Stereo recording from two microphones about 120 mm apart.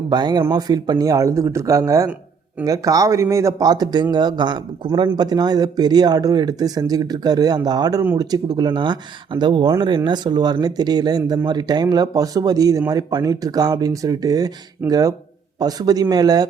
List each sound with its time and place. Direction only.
0.1 s speech: 35° right (ahead or behind)